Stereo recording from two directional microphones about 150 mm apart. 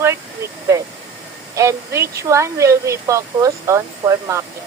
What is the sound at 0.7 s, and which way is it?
Speech, 20° right (ahead or behind).